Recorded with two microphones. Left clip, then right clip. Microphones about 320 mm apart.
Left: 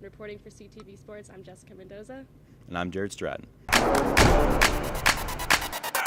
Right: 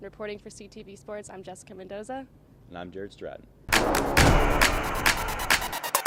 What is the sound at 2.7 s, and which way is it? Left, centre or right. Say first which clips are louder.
Speech: left 7 dB; left.